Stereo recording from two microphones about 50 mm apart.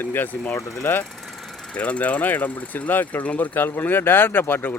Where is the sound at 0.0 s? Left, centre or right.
Left.